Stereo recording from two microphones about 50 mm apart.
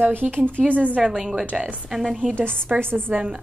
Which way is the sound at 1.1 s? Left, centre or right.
Centre.